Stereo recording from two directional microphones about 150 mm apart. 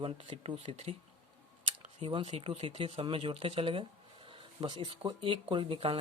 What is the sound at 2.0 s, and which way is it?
Speech, 35° right (ahead or behind).